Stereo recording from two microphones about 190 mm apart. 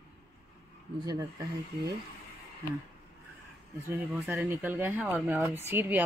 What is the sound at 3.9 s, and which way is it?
Speech, 10° right (ahead or behind).